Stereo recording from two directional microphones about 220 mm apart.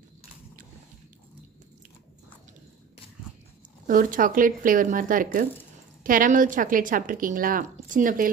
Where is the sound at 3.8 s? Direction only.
40° right (ahead or behind).